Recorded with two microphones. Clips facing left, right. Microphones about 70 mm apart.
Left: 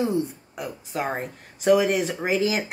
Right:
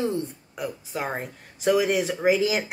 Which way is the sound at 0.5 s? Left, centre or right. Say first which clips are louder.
Left 1 dB; centre.